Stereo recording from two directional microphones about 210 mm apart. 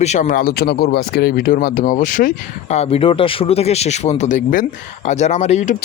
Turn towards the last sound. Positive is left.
turn(degrees=35)  # may be behind; listen again after turning